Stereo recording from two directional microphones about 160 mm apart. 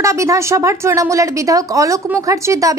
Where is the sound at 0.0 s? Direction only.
20° right (ahead or behind).